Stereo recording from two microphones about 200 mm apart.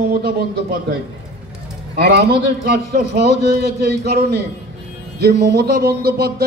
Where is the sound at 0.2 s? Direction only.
50° right (ahead or behind).